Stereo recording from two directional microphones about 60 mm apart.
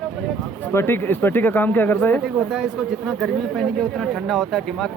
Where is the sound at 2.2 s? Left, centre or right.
Centre.